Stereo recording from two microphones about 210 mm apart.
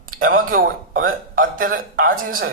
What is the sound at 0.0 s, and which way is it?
Speech, 40° right (ahead or behind).